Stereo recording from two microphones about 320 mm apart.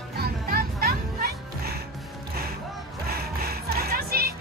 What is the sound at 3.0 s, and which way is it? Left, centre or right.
Music, right.